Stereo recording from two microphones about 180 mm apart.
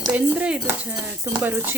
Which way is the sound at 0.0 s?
10° right (ahead or behind).